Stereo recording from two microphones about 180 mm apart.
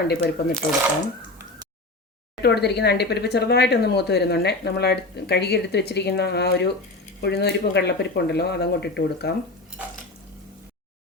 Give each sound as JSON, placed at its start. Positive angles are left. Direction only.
{"t": 0.1, "sound": "speech", "side_deg": 65}
{"t": 2.4, "sound": "speech", "side_deg": 65}